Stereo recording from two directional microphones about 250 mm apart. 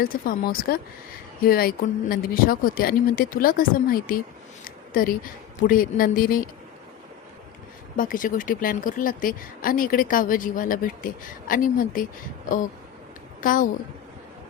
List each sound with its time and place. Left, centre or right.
0.0 s a woman's voice: left
7.9 s speech: left
13.4 s a woman's voice: left